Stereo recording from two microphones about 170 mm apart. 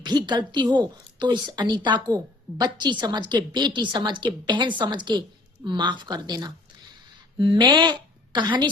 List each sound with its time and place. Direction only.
0.0 s a woman's voice: 25° right (ahead or behind)